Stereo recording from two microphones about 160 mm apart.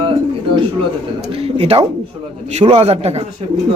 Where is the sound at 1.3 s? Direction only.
40° right (ahead or behind).